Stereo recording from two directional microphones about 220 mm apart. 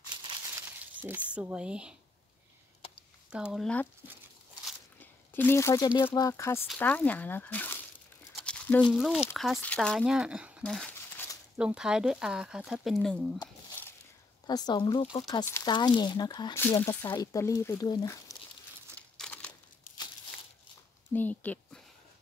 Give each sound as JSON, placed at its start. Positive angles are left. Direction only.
{"t": 1.0, "sound": "speech", "side_deg": -5}
{"t": 3.3, "sound": "speech", "side_deg": -5}
{"t": 5.3, "sound": "speech", "side_deg": 10}
{"t": 6.7, "sound": "crumpling", "side_deg": 10}
{"t": 8.9, "sound": "speech", "side_deg": 0}
{"t": 10.6, "sound": "crumpling", "side_deg": 5}
{"t": 11.5, "sound": "speech", "side_deg": -5}
{"t": 13.4, "sound": "squish", "side_deg": 10}
{"t": 14.4, "sound": "speech", "side_deg": 20}
{"t": 18.9, "sound": "crumpling", "side_deg": 5}
{"t": 21.1, "sound": "speech", "side_deg": 10}